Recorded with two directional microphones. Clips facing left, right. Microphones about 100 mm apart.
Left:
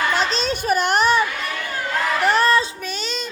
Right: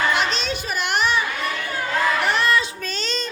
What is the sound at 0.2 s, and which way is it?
Children playing, 40° left (ahead or behind).